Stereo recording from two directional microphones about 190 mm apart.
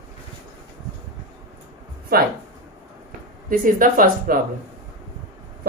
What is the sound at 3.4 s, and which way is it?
Speech, 45° right (ahead or behind).